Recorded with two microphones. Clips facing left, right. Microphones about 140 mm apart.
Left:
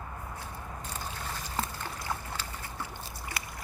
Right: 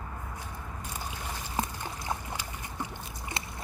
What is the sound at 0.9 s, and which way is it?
Boat, 15° right (ahead or behind).